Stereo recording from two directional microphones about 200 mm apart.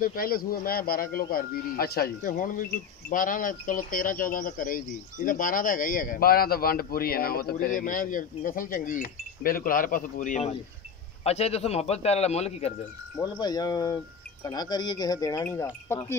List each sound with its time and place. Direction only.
0.0 s a man's voice: 45° left (ahead or behind)
13.2 s speech: 20° left (ahead or behind)